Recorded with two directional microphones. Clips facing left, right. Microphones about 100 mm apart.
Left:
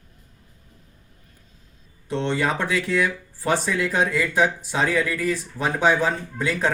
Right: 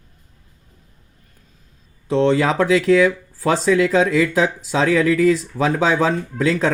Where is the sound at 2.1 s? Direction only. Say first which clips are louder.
Right 7 dB; 90° right.